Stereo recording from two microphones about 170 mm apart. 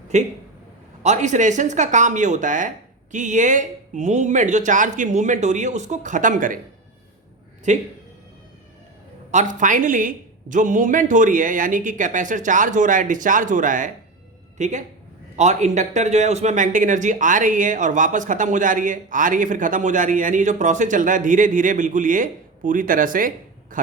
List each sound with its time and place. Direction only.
0.1 s speech: 45° right (ahead or behind)
7.7 s speech: 45° right (ahead or behind)
9.3 s speech: 45° right (ahead or behind)